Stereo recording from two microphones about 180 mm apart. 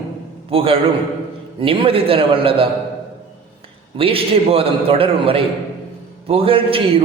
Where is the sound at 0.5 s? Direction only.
30° right (ahead or behind).